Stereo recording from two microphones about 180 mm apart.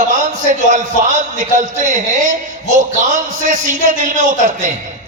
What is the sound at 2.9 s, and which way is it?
A man's voice, 45° right (ahead or behind).